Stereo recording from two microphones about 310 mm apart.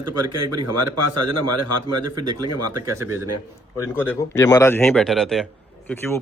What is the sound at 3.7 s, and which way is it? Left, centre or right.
Speech, centre.